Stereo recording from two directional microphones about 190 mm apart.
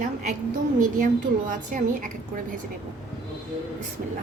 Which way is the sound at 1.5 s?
45° right (ahead or behind).